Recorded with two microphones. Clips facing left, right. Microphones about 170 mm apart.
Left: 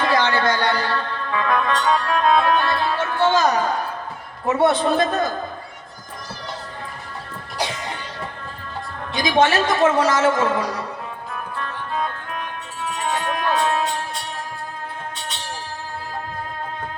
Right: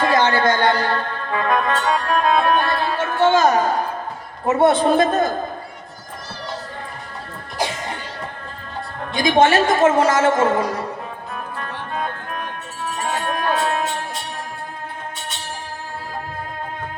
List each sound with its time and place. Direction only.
0.0 s music: 50° right (ahead or behind)
4.4 s a man's voice: 50° right (ahead or behind)
9.1 s a man's voice: 50° right (ahead or behind)
12.9 s music: 45° right (ahead or behind)